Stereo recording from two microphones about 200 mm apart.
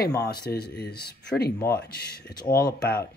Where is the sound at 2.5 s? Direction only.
50° left (ahead or behind).